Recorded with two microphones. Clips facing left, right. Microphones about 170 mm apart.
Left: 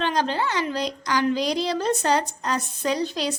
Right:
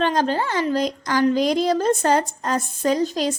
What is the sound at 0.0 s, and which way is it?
A woman's voice, 45° right (ahead or behind).